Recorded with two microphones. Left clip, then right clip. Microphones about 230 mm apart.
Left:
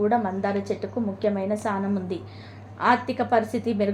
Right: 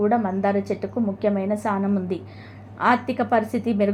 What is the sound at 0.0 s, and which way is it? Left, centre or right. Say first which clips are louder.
A woman's voice: right 2 dB; centre.